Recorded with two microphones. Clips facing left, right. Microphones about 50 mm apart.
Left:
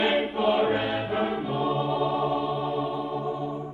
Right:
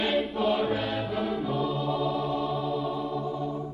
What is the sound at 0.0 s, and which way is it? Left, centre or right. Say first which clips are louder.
Music: left 3 dB; centre.